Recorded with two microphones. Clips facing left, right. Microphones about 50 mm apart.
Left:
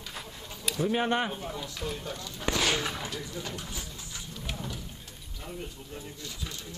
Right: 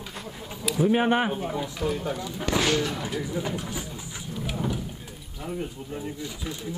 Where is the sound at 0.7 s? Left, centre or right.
Centre.